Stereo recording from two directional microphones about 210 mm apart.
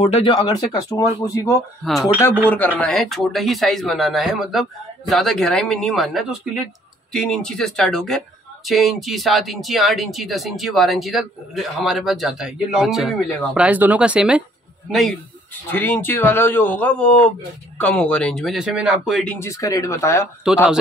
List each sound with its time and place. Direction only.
0.0 s speech: 30° left (ahead or behind)
0.3 s speech: 20° left (ahead or behind)
1.8 s speech: centre (ahead or behind)
19.4 s speech: 15° left (ahead or behind)
20.4 s speech: 5° right (ahead or behind)